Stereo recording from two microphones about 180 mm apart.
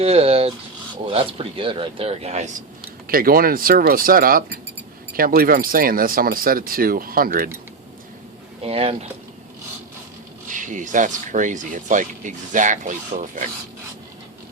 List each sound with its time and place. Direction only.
0.0 s speech: 35° right (ahead or behind)
3.1 s speech: 55° right (ahead or behind)
8.6 s speech: 35° right (ahead or behind)
10.5 s speech: 45° right (ahead or behind)